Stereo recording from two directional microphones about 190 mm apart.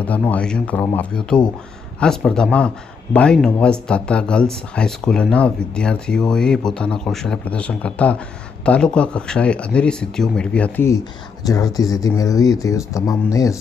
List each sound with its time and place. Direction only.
0.0 s speech: 10° left (ahead or behind)